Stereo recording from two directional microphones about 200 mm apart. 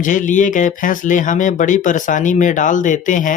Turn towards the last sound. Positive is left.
turn(degrees=40)  # may be behind; listen again after turning